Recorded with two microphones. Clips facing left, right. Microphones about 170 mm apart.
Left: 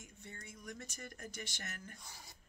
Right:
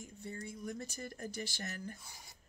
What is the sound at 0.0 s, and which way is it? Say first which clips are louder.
Speech: right 8 dB; 35° right (ahead or behind).